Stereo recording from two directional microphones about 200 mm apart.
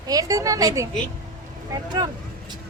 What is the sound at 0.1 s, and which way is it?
Speech, 15° right (ahead or behind).